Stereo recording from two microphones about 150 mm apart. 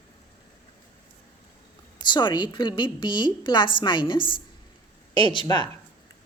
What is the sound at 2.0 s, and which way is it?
A woman's voice, 30° left (ahead or behind).